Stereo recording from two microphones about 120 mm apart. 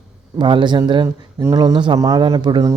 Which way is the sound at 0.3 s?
40° right (ahead or behind).